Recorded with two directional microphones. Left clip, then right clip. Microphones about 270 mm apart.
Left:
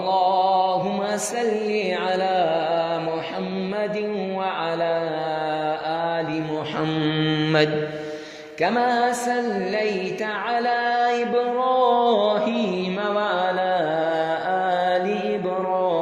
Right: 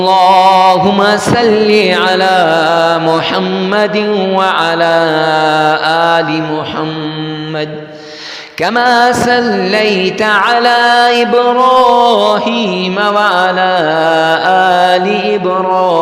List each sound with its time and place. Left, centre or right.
0.0 s mantra: right
8.6 s music: right